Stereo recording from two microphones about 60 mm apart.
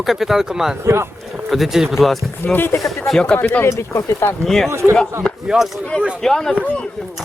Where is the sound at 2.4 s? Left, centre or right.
Left.